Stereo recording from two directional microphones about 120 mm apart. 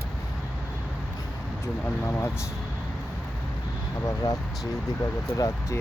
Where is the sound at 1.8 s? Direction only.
20° left (ahead or behind).